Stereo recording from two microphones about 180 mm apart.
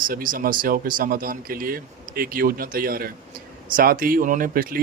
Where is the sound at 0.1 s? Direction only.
50° right (ahead or behind).